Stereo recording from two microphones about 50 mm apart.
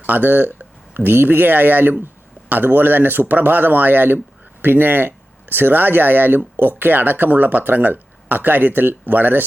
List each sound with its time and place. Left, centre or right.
0.0 s speech: right